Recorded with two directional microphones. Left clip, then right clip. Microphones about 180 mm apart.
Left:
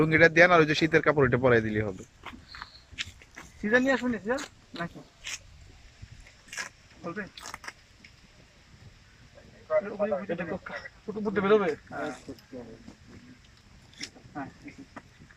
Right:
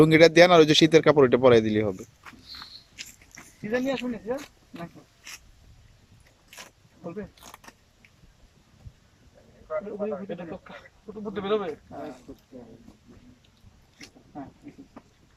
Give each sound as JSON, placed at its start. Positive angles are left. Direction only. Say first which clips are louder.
{"t": 0.0, "sound": "speech", "louder": "right 4 dB", "side_deg": -15}
{"t": 3.7, "sound": "speech", "louder": "left 3 dB", "side_deg": -15}
{"t": 7.0, "sound": "speech", "louder": "left 1 dB", "side_deg": -20}
{"t": 7.4, "sound": "a sound", "louder": "left 5 dB", "side_deg": -10}
{"t": 9.6, "sound": "a man's voice", "louder": "left 3 dB", "side_deg": 10}
{"t": 11.1, "sound": "speech", "louder": "left 4 dB", "side_deg": 0}